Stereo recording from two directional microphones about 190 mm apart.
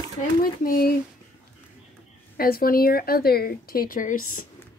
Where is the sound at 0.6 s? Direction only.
50° left (ahead or behind).